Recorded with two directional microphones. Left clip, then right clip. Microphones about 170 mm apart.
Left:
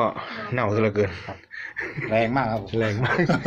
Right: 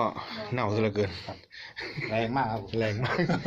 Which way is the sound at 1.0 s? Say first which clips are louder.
Left 6 dB; 5° right (ahead or behind).